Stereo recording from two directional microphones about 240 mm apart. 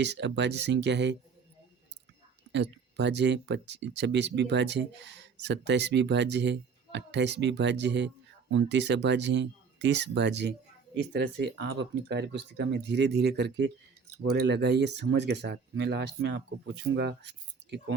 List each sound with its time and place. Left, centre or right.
0.0 s speech: right
2.5 s speech: right